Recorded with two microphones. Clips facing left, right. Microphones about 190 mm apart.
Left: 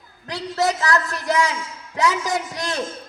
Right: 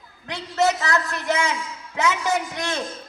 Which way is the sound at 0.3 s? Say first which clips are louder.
Right 1 dB; 35° left (ahead or behind).